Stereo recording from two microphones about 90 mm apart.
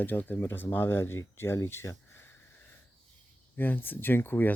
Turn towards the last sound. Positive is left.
turn(degrees=25)  # may be behind; listen again after turning